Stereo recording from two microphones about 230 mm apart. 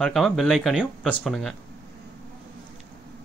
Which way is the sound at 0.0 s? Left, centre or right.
Centre.